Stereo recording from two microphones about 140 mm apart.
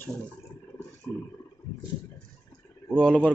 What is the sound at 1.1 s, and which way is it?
Speech, 20° left (ahead or behind).